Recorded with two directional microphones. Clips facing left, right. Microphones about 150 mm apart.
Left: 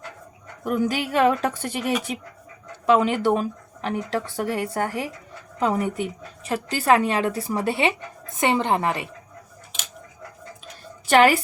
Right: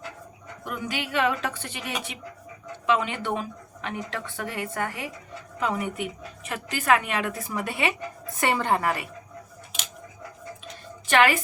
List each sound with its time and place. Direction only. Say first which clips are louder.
0.6 s a woman's voice: left 9 dB; 40° left (ahead or behind); by 9.0 s 25° left (ahead or behind)
11.1 s a woman's voice: left 5 dB; 35° left (ahead or behind)